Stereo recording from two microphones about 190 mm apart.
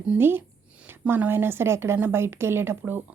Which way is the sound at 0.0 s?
10° right (ahead or behind).